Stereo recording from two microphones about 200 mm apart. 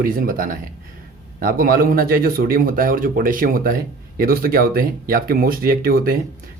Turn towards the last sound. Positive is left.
turn(degrees=-45)  # may be behind; listen again after turning